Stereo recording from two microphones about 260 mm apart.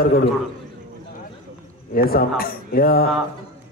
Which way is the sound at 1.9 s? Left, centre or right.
Left.